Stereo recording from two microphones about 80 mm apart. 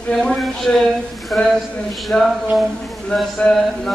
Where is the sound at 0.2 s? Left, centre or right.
Centre.